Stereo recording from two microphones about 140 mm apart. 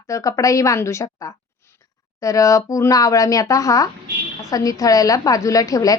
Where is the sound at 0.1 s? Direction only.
25° left (ahead or behind).